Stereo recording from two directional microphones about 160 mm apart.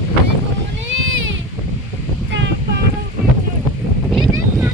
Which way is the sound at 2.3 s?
90° right.